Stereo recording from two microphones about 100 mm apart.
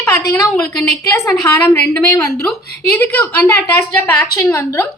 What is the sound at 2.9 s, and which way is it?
A woman's voice, 20° left (ahead or behind).